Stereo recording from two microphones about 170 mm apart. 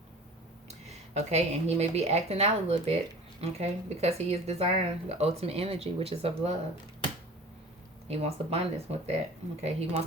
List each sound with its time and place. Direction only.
0.7 s speech: 40° right (ahead or behind)
8.0 s speech: 40° right (ahead or behind)